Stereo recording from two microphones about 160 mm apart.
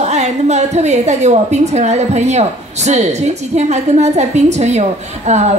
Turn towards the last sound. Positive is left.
turn(degrees=-45)  # may be behind; listen again after turning